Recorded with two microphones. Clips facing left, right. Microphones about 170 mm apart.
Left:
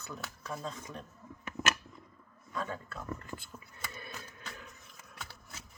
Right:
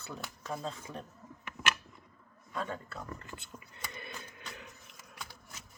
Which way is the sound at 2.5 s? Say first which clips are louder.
Even; 25° right (ahead or behind).